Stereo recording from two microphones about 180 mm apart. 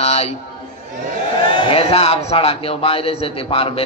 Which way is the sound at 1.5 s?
30° left (ahead or behind).